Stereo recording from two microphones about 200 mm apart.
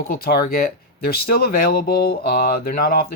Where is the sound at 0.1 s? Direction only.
50° left (ahead or behind).